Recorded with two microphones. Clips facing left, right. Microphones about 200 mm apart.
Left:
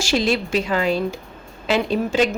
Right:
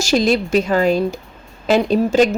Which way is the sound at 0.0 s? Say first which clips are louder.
Right 4 dB; 40° right (ahead or behind).